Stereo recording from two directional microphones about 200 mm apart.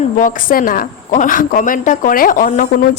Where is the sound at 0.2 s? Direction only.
40° left (ahead or behind).